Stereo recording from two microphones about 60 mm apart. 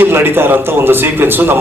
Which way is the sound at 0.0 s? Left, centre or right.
Right.